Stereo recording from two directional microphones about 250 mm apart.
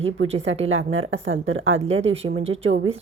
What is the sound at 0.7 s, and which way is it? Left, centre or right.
Speech, right.